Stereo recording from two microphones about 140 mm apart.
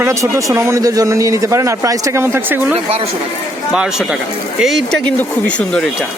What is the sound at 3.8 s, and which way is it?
Speech, 5° right (ahead or behind).